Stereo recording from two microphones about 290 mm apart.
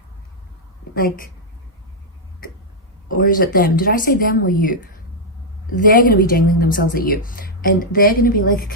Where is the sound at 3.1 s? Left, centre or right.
Left.